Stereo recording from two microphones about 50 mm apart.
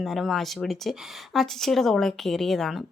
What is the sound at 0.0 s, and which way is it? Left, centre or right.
Speech, centre.